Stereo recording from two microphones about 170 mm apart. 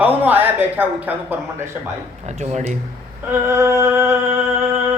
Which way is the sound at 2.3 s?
40° right (ahead or behind).